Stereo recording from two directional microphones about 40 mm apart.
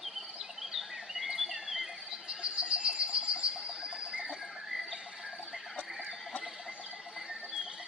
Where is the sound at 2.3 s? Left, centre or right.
Right.